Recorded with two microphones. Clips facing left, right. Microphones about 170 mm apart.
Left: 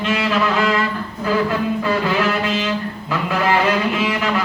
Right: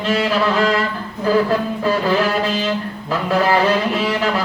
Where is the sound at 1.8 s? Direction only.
35° right (ahead or behind).